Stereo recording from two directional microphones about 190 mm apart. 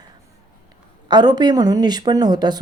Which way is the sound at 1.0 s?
20° right (ahead or behind).